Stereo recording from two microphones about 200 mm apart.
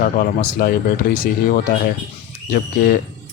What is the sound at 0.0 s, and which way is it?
Speech, 45° left (ahead or behind).